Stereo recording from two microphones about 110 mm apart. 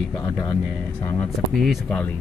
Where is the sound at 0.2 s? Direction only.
35° left (ahead or behind).